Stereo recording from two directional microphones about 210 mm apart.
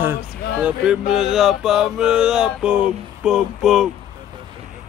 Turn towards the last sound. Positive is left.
turn(degrees=0)  # may be behind; listen again after turning